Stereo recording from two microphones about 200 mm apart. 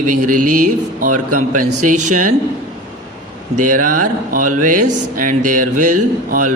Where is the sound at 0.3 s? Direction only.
40° right (ahead or behind).